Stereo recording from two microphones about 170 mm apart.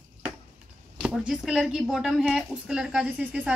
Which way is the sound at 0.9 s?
5° right (ahead or behind).